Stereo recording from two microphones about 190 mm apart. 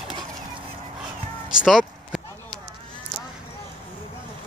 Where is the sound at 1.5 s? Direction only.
Centre (ahead or behind).